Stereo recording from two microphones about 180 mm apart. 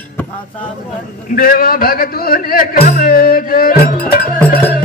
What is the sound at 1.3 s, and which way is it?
Speech, 55° left (ahead or behind).